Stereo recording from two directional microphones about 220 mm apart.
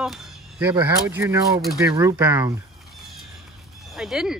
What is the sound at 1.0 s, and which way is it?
Speech, 10° right (ahead or behind).